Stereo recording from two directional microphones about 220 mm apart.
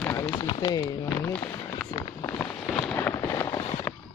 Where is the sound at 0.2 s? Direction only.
20° left (ahead or behind).